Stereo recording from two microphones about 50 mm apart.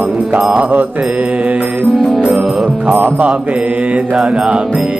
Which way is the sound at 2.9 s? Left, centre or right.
Right.